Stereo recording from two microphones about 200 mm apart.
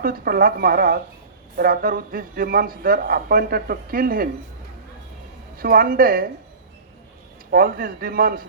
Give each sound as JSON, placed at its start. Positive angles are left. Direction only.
{"t": 0.0, "sound": "speech", "side_deg": -45}
{"t": 5.5, "sound": "speech", "side_deg": -45}
{"t": 7.5, "sound": "speech", "side_deg": -45}